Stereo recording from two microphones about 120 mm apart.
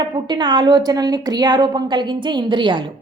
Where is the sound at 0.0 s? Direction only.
40° right (ahead or behind).